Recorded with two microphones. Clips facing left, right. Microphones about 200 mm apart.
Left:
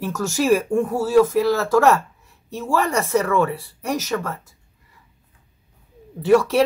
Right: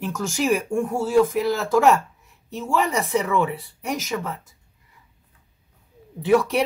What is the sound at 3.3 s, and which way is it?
Speech, 15° right (ahead or behind).